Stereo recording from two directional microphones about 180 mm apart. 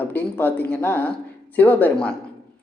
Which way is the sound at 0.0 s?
10° left (ahead or behind).